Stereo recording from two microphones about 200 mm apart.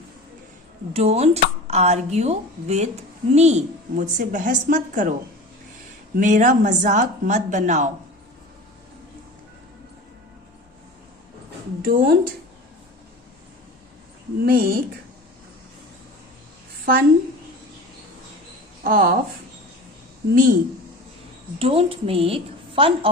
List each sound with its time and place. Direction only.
0.9 s a woman's voice: 30° right (ahead or behind)
6.1 s a woman's voice: 40° right (ahead or behind)
11.8 s a woman's voice: 50° right (ahead or behind)
14.4 s a woman's voice: 45° right (ahead or behind)
18.8 s speech: 45° right (ahead or behind)
20.3 s a woman's voice: 45° right (ahead or behind)
21.6 s a woman's voice: 30° right (ahead or behind)